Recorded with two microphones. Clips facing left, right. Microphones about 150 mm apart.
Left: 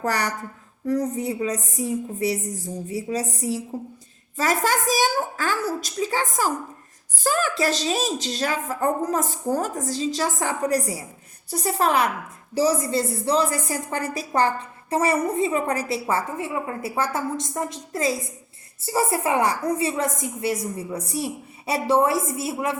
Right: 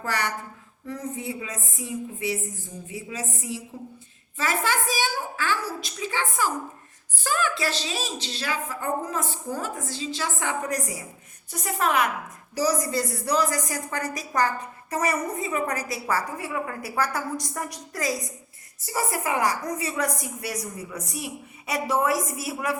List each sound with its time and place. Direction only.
0.0 s a woman's voice: 35° left (ahead or behind)